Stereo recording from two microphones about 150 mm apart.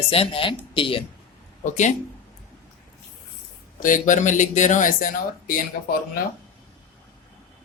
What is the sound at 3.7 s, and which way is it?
Speech, 60° left (ahead or behind).